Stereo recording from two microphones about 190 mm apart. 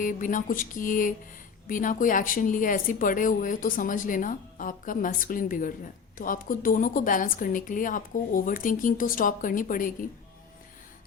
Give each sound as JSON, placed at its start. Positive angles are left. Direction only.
{"t": 0.0, "sound": "a woman's voice", "side_deg": 45}